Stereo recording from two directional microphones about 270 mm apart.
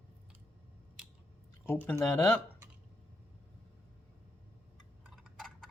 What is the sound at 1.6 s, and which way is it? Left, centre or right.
Speech, centre.